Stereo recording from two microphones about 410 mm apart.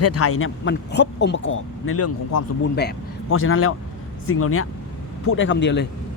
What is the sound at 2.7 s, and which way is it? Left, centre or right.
Speech, left.